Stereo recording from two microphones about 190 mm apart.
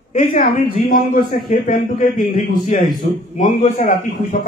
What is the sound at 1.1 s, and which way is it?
A man's voice, 45° left (ahead or behind).